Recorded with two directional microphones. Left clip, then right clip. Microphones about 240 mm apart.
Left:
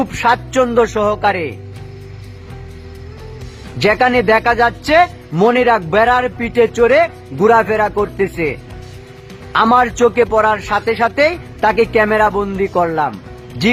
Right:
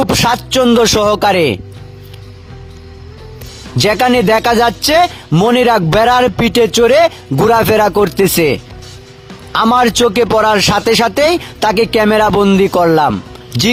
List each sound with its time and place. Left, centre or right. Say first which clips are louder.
0.2 s speech: right 1 dB; right
3.8 s speech: right 1 dB; right